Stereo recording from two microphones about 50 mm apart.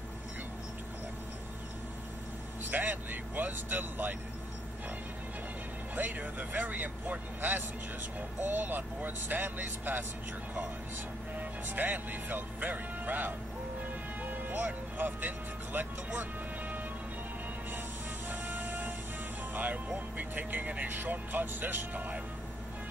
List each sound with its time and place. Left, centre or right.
2.7 s speech: right
5.9 s speech: right
11.3 s speech: right
18.3 s music: right
20.2 s speech: right